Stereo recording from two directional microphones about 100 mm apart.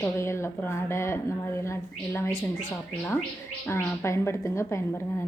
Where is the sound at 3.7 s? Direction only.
25° left (ahead or behind).